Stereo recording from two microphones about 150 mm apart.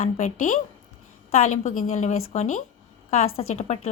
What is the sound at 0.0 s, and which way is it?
A woman's voice, 50° left (ahead or behind).